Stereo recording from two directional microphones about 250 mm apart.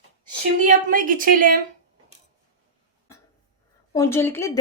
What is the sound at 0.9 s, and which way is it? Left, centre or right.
Speech, right.